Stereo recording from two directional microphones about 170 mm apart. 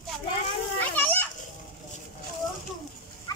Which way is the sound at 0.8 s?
10° left (ahead or behind).